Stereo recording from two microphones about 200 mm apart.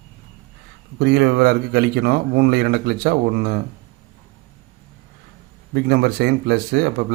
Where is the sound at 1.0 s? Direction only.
55° right (ahead or behind).